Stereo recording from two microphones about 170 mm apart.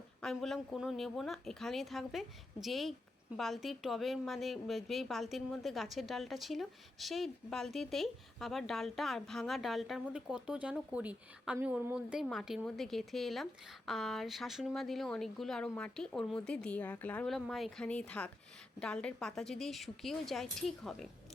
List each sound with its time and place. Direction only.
0.2 s a woman's voice: centre (ahead or behind)